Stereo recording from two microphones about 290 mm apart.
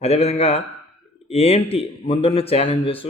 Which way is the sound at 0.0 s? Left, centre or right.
Left.